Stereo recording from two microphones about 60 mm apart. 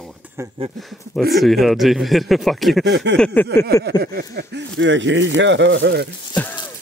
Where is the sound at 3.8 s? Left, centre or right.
Left.